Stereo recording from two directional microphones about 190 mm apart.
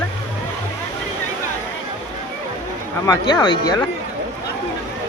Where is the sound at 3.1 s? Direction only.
20° left (ahead or behind).